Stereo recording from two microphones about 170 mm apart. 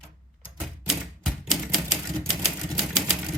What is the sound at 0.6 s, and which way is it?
Typewriter, centre (ahead or behind).